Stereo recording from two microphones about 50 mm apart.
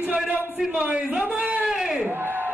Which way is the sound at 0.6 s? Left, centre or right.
Centre.